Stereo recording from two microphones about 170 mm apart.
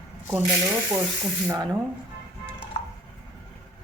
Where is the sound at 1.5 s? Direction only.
25° right (ahead or behind).